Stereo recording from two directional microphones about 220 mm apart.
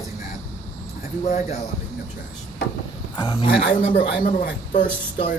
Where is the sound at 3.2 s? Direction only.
25° left (ahead or behind).